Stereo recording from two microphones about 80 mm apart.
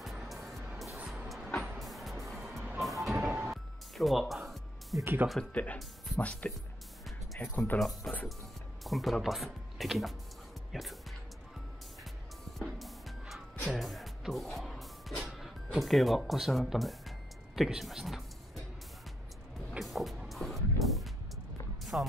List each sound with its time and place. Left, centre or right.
0.3 s music: centre
0.9 s music: centre
1.8 s music: centre
2.8 s vehicle: centre
3.3 s music: right
3.9 s music: centre
5.0 s speech: right
5.4 s speech: centre
7.5 s speech: left
8.0 s speech: centre
10.7 s music: centre
12.5 s music: centre
19.8 s music: centre
21.9 s music: centre